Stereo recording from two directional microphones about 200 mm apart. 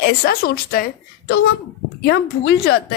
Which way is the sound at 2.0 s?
55° left (ahead or behind).